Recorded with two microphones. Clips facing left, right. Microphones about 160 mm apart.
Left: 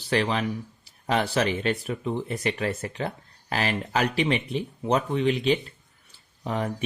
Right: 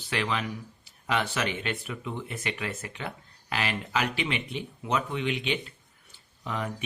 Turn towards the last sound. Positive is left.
turn(degrees=35)  # may be behind; listen again after turning